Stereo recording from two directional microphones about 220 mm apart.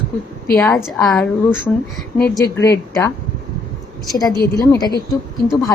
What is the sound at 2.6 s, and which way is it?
Speech, 15° left (ahead or behind).